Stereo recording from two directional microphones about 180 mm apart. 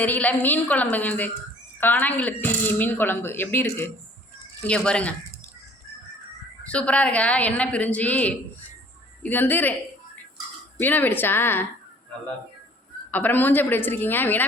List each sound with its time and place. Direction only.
0.0 s speech: 10° left (ahead or behind)
6.7 s speech: 5° left (ahead or behind)
10.8 s speech: 10° left (ahead or behind)
13.1 s speech: 10° left (ahead or behind)